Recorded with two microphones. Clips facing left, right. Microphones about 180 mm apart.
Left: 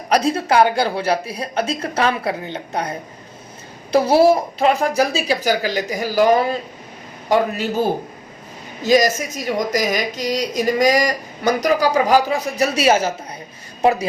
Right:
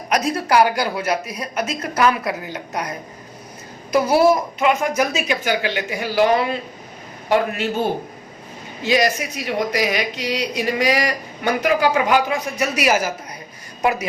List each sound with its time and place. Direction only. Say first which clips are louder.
0.1 s a woman's voice: left 2 dB; 30° left (ahead or behind)